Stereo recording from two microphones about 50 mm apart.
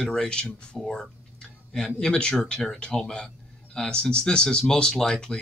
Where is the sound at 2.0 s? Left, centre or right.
Centre.